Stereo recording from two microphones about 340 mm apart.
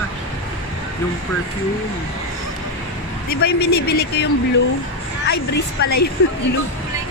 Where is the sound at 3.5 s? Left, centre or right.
Left.